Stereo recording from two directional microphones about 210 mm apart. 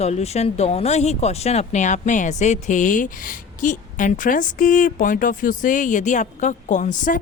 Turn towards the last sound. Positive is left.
turn(degrees=40)  # may be behind; listen again after turning